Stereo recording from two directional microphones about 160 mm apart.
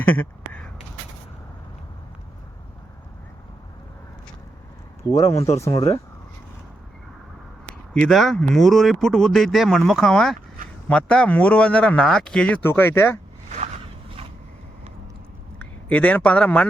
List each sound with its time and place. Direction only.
0.0 s a sound: 10° left (ahead or behind)
5.0 s speech: 25° left (ahead or behind)
7.9 s a man's voice: 5° left (ahead or behind)
15.5 s speech: 10° left (ahead or behind)